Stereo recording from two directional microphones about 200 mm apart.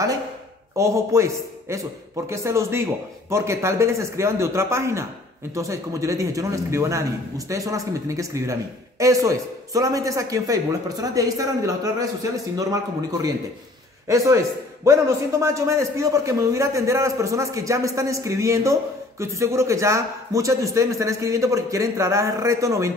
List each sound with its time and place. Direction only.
0.7 s a man's voice: 15° right (ahead or behind)
14.0 s a man's voice: 15° right (ahead or behind)